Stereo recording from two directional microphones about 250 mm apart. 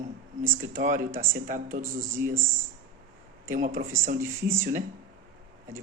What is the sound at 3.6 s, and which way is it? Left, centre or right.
Speech, right.